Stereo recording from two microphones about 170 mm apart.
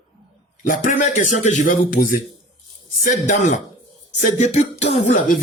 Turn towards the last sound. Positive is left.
turn(degrees=45)  # may be behind; listen again after turning